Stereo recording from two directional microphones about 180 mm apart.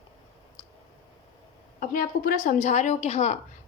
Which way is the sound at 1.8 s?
50° left (ahead or behind).